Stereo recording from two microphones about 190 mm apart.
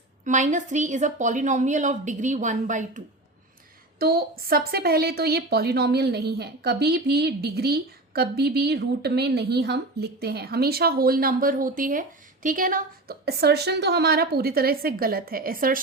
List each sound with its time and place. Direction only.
0.3 s a woman's voice: 40° right (ahead or behind)
3.9 s a woman's voice: 50° right (ahead or behind)